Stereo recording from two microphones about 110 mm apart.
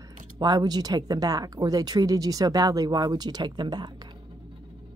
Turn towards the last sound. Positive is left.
turn(degrees=-40)  # may be behind; listen again after turning